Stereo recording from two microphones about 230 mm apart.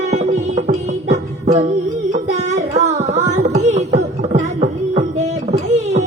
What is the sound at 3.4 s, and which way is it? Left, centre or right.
Music, right.